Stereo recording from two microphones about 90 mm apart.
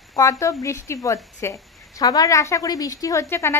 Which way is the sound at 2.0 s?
40° left (ahead or behind).